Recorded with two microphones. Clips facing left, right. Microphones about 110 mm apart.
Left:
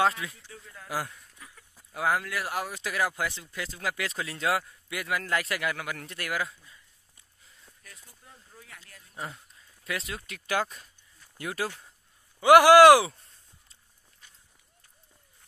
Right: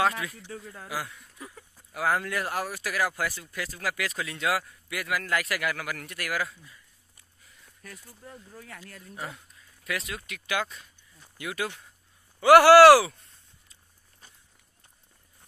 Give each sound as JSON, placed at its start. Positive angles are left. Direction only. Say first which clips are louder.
{"t": 0.5, "sound": "speech", "louder": "right 8 dB", "side_deg": -45}
{"t": 0.8, "sound": "speech", "louder": "left 2 dB", "side_deg": 45}
{"t": 1.9, "sound": "speech", "louder": "right 1 dB", "side_deg": 20}
{"t": 2.1, "sound": "speech", "louder": "right 2 dB", "side_deg": 5}
{"t": 8.2, "sound": "speech", "louder": "right 9 dB", "side_deg": -70}
{"t": 9.8, "sound": "speech", "louder": "right 1 dB", "side_deg": 30}
{"t": 12.4, "sound": "speech", "louder": "right 1 dB", "side_deg": 15}
{"t": 14.2, "sound": "run", "louder": "right 3 dB", "side_deg": -35}